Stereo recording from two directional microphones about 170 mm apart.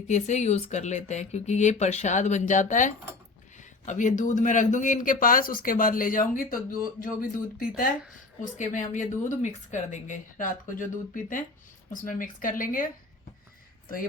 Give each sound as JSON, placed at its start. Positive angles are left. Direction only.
{"t": 0.1, "sound": "speech", "side_deg": 40}
{"t": 8.5, "sound": "speech", "side_deg": 45}